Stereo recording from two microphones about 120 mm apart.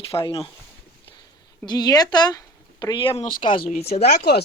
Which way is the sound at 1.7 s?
35° left (ahead or behind).